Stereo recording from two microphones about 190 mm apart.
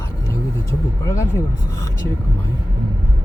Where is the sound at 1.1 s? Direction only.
15° left (ahead or behind).